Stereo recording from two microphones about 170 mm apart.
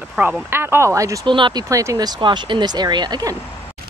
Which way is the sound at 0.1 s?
5° right (ahead or behind).